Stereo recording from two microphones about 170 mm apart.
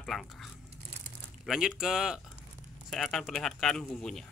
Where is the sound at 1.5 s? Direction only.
5° right (ahead or behind).